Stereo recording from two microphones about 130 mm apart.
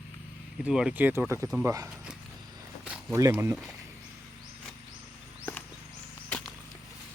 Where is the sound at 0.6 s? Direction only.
5° right (ahead or behind); by 1.8 s 25° right (ahead or behind).